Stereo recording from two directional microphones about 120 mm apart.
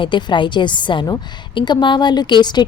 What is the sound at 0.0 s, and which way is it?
A woman's voice, 40° left (ahead or behind).